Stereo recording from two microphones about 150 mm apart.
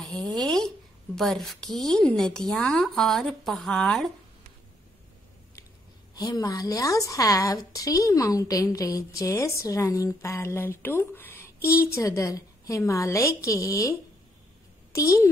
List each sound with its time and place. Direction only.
0.0 s speech: 5° left (ahead or behind)
6.1 s a woman's voice: 25° left (ahead or behind)